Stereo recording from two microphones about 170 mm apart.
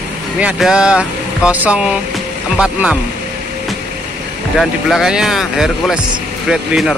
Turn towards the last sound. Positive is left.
turn(degrees=0)  # may be behind; listen again after turning